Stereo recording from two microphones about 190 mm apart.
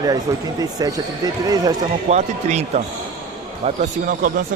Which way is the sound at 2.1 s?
35° right (ahead or behind).